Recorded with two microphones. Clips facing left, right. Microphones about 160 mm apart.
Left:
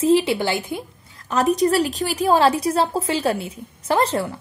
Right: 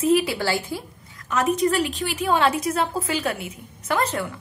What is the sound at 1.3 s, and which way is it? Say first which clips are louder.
A woman's voice: left 3 dB; 35° left (ahead or behind).